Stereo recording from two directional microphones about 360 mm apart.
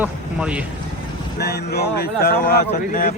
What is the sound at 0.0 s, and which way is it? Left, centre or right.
Speech, centre.